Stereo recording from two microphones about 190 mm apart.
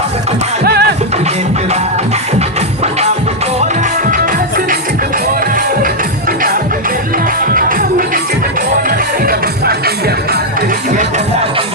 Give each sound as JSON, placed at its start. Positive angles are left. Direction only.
{"t": 0.6, "sound": "music", "side_deg": -55}
{"t": 4.1, "sound": "music", "side_deg": -45}